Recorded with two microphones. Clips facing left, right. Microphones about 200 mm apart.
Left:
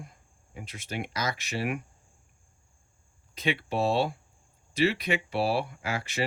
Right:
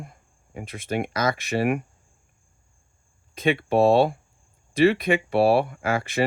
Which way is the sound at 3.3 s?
50° right (ahead or behind).